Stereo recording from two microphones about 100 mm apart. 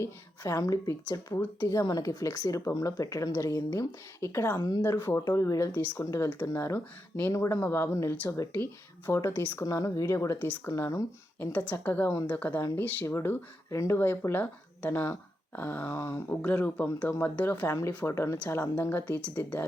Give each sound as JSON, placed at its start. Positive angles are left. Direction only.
{"t": 0.0, "sound": "speech", "side_deg": 35}
{"t": 4.5, "sound": "speech", "side_deg": 40}
{"t": 4.8, "sound": "speech", "side_deg": 25}
{"t": 9.6, "sound": "speech", "side_deg": 35}
{"t": 11.3, "sound": "speech", "side_deg": 15}
{"t": 17.7, "sound": "speech", "side_deg": 30}